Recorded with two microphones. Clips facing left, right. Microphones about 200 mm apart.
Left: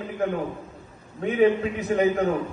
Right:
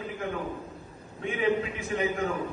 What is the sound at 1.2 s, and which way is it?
A man's voice, 35° left (ahead or behind).